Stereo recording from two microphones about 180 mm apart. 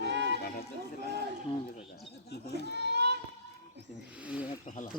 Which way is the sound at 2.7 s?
70° right (ahead or behind).